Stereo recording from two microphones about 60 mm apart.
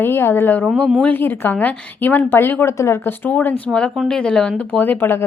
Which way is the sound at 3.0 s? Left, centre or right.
Left.